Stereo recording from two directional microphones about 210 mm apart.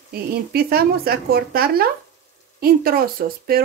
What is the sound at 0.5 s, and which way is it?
Speech, 45° right (ahead or behind).